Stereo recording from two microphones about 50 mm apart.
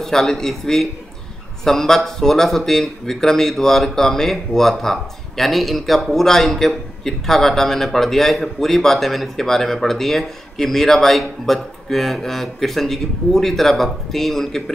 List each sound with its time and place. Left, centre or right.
0.0 s a man's voice: centre